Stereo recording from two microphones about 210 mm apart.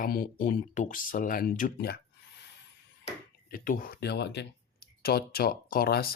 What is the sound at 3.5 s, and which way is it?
Speech, 45° left (ahead or behind).